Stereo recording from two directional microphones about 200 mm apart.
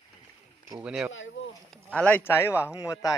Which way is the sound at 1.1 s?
70° left (ahead or behind).